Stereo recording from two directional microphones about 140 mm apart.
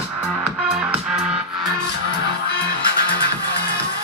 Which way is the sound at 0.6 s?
5° right (ahead or behind).